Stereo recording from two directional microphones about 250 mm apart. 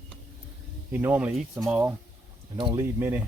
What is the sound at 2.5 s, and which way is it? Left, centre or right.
Speech, centre.